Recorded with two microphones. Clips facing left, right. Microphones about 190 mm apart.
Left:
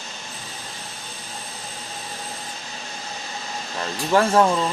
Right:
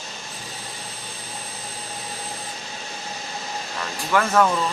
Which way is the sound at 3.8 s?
30° left (ahead or behind).